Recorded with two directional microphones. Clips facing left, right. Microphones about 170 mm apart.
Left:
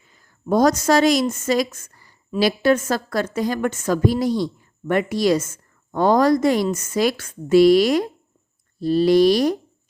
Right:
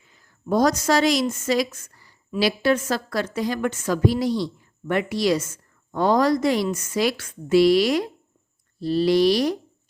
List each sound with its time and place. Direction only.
0.0 s a woman's voice: 45° left (ahead or behind)